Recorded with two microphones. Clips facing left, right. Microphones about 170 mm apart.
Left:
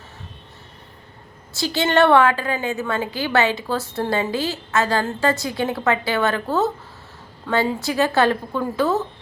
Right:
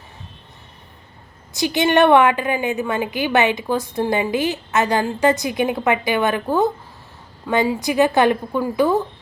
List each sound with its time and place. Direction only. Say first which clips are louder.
1.5 s a woman's voice: right 2 dB; 15° right (ahead or behind)